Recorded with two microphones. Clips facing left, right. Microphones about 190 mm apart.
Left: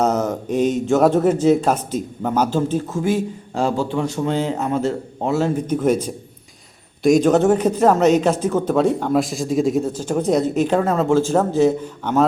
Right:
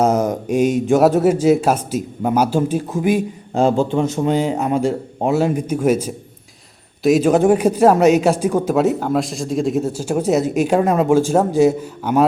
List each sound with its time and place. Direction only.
0.0 s speech: 10° right (ahead or behind)